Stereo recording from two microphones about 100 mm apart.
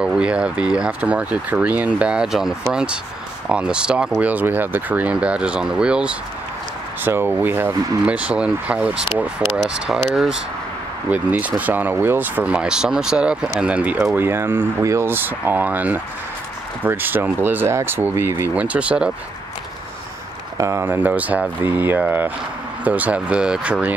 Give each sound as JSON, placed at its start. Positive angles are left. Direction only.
{"t": 0.0, "sound": "speech", "side_deg": -10}
{"t": 7.1, "sound": "speech", "side_deg": -20}
{"t": 9.5, "sound": "speech", "side_deg": 0}
{"t": 11.1, "sound": "speech", "side_deg": -15}
{"t": 13.9, "sound": "speech", "side_deg": -25}
{"t": 20.5, "sound": "speech", "side_deg": -30}
{"t": 20.8, "sound": "speech", "side_deg": -20}